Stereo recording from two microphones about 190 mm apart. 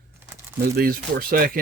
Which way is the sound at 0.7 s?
50° right (ahead or behind).